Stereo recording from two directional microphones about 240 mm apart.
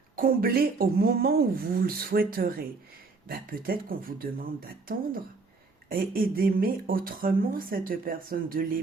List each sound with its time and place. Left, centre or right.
0.2 s speech: right